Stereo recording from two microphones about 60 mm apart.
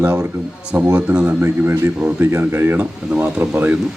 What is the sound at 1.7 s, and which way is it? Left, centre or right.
Speech, right.